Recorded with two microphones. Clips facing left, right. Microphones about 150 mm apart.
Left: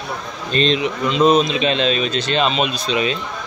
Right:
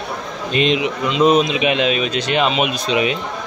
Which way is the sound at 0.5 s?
15° right (ahead or behind).